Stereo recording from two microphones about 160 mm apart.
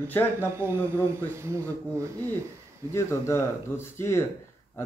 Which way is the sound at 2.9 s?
15° left (ahead or behind).